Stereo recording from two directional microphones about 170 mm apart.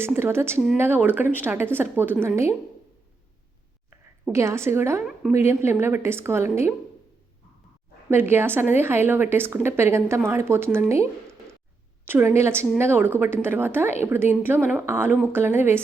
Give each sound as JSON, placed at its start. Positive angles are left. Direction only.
{"t": 0.0, "sound": "a woman's voice", "side_deg": -15}
{"t": 3.8, "sound": "a woman's voice", "side_deg": -15}
{"t": 8.1, "sound": "a woman's voice", "side_deg": -15}